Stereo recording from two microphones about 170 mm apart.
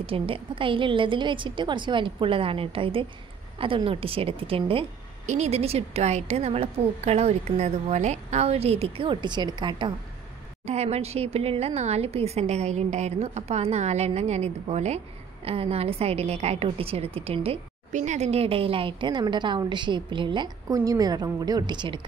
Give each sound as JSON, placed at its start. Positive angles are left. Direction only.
{"t": 0.0, "sound": "a woman's voice", "side_deg": -30}
{"t": 10.7, "sound": "a woman's voice", "side_deg": -40}